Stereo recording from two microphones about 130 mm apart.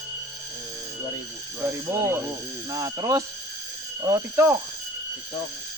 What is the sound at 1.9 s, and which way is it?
Speech, 20° right (ahead or behind).